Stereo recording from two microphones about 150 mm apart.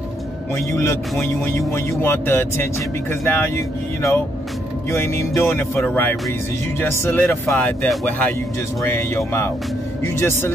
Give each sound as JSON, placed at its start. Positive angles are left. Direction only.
{"t": 1.2, "sound": "speech", "side_deg": 20}